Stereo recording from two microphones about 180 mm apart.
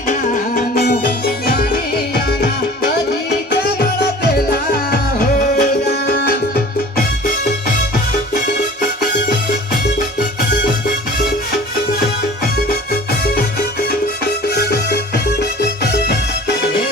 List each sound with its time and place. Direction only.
0.1 s music: 55° left (ahead or behind)
5.5 s music: 55° left (ahead or behind)
9.5 s music: 65° left (ahead or behind)
12.9 s music: 60° left (ahead or behind)
14.5 s music: 60° left (ahead or behind)